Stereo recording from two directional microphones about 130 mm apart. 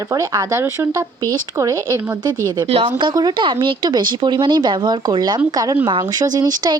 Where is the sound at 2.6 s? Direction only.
50° right (ahead or behind).